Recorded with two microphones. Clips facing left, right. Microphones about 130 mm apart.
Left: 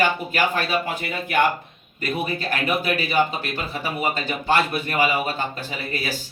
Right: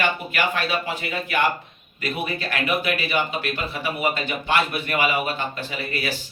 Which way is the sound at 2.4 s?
40° left (ahead or behind).